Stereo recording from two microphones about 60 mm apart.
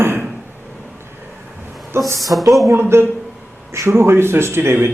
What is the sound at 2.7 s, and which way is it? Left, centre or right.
A man's voice, right.